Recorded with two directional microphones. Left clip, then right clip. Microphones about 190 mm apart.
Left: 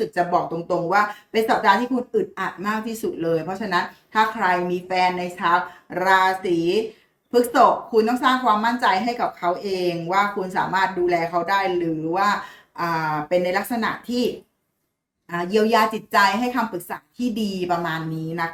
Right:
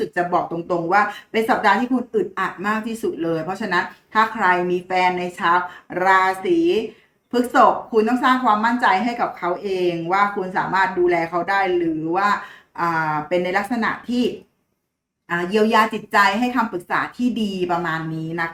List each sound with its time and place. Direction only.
0.0 s a woman's voice: 5° left (ahead or behind)
15.3 s a woman's voice: 5° left (ahead or behind)